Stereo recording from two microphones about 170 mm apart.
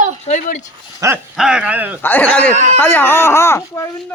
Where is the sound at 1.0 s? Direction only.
20° right (ahead or behind).